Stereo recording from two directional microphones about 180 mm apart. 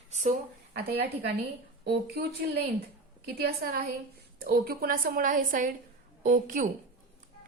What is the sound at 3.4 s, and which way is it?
A woman's voice, 55° right (ahead or behind).